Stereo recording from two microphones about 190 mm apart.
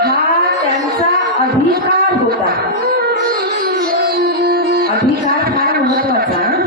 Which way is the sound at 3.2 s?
55° right (ahead or behind).